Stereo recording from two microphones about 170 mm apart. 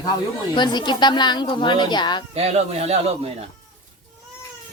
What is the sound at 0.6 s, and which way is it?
A woman's voice, 25° left (ahead or behind).